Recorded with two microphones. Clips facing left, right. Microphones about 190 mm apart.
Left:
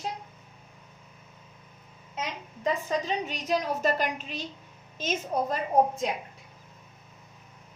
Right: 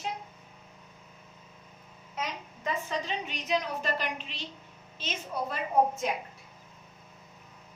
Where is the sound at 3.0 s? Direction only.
40° left (ahead or behind).